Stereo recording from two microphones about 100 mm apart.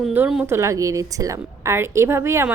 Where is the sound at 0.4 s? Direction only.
30° right (ahead or behind).